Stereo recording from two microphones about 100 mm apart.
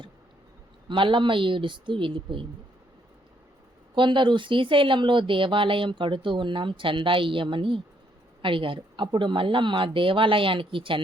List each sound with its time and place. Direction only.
0.9 s speech: 55° right (ahead or behind)
3.9 s speech: 55° right (ahead or behind)